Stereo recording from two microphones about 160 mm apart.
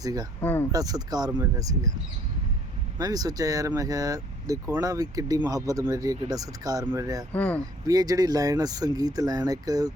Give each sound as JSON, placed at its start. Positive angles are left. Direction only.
{"t": 0.0, "sound": "speech", "side_deg": -20}
{"t": 0.4, "sound": "speech", "side_deg": 10}
{"t": 0.7, "sound": "speech", "side_deg": -25}
{"t": 3.0, "sound": "speech", "side_deg": -25}
{"t": 7.3, "sound": "speech", "side_deg": 10}
{"t": 7.9, "sound": "speech", "side_deg": -25}